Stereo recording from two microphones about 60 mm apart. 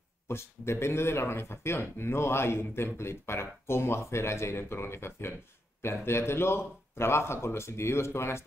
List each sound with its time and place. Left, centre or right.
0.3 s speech: left